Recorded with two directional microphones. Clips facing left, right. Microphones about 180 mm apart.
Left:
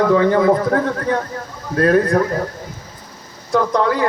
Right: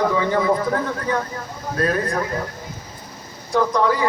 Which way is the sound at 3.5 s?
60° left (ahead or behind).